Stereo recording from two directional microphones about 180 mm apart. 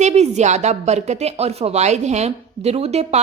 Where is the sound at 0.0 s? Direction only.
40° right (ahead or behind).